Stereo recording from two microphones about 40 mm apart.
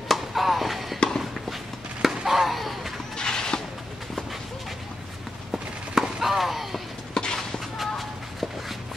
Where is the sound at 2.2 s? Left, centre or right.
Centre.